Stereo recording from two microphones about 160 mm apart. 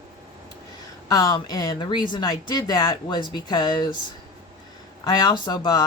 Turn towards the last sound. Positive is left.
turn(degrees=25)  # may be behind; listen again after turning